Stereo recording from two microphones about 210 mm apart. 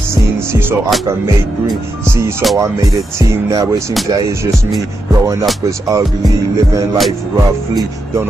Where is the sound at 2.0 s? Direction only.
15° right (ahead or behind).